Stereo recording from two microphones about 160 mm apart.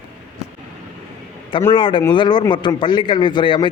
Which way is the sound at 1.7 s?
30° left (ahead or behind).